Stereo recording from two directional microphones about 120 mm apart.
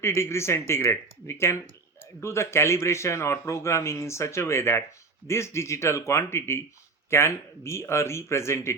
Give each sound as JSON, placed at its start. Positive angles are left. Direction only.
{"t": 0.0, "sound": "a man's voice", "side_deg": 20}